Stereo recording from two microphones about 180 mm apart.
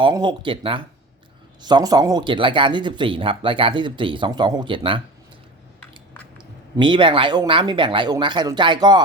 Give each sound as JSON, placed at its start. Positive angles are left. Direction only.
{"t": 0.0, "sound": "speech", "side_deg": -25}
{"t": 6.7, "sound": "speech", "side_deg": -25}